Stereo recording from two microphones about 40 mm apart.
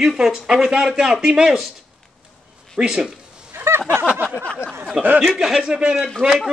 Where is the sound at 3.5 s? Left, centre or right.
Right.